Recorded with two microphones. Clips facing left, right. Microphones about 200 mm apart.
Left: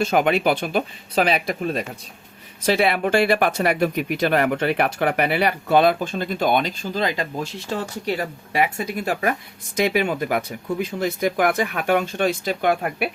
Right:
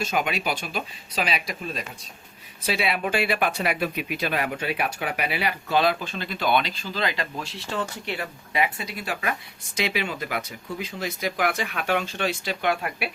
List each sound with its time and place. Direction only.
0.0 s speech: 55° left (ahead or behind)